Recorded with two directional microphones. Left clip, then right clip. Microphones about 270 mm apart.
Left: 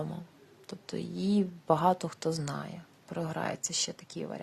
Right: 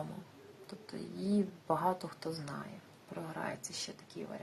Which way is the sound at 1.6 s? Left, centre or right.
Left.